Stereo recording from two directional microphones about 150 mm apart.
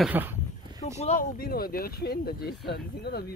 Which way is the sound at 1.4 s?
85° left.